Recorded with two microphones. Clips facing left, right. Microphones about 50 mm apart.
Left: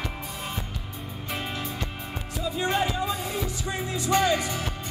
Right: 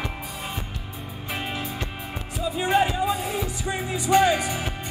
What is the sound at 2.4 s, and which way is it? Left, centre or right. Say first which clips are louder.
Music: right 4 dB; centre.